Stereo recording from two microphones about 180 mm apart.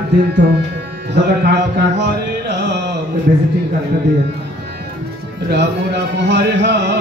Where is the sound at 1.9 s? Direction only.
70° right (ahead or behind).